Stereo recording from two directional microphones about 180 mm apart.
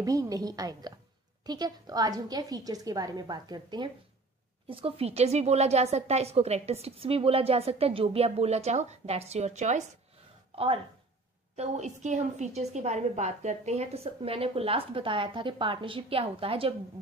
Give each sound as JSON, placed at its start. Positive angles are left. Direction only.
{"t": 0.0, "sound": "a woman's voice", "side_deg": -20}
{"t": 10.5, "sound": "a sound", "side_deg": -30}
{"t": 11.5, "sound": "a woman's voice", "side_deg": -40}